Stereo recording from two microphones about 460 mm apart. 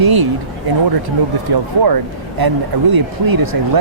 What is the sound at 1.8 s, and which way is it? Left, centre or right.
Speech, right.